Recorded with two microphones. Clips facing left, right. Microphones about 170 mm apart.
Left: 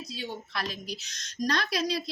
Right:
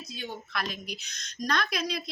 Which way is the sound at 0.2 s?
35° left (ahead or behind).